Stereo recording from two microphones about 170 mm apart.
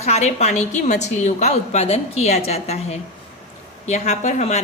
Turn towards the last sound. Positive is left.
turn(degrees=45)  # may be behind; listen again after turning